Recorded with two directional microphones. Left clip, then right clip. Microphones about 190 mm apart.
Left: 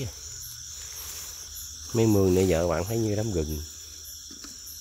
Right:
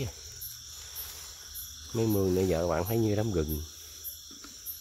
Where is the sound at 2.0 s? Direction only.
25° left (ahead or behind).